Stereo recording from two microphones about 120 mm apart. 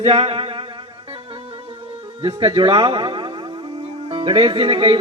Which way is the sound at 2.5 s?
45° right (ahead or behind).